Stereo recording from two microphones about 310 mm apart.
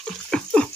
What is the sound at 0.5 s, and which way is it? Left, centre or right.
Dog, centre.